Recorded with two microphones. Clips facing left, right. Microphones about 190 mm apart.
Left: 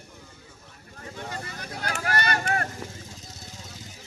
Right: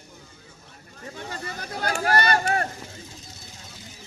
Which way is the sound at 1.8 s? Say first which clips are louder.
Right 5 dB; 30° right (ahead or behind).